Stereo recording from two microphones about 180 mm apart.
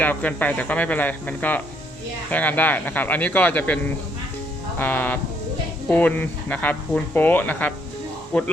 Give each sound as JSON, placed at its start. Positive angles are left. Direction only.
{"t": 0.0, "sound": "speech", "side_deg": 10}
{"t": 4.8, "sound": "speech", "side_deg": 10}